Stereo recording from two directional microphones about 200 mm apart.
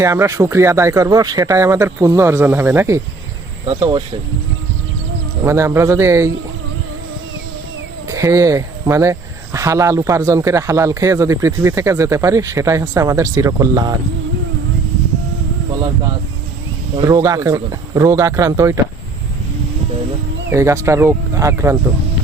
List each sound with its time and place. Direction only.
0.0 s speech: 15° right (ahead or behind)
5.4 s speech: 15° right (ahead or behind)
8.0 s speech: 15° right (ahead or behind)
17.0 s speech: 15° right (ahead or behind)
20.5 s speech: 15° right (ahead or behind)